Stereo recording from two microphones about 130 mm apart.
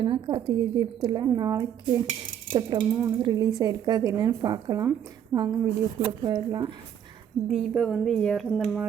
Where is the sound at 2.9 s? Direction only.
20° right (ahead or behind).